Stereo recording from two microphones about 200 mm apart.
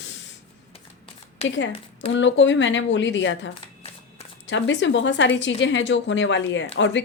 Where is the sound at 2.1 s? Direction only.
65° left (ahead or behind).